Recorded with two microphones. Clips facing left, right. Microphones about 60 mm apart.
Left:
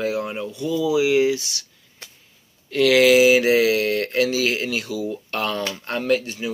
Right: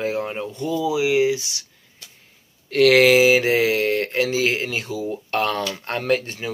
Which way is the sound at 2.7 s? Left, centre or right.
Right.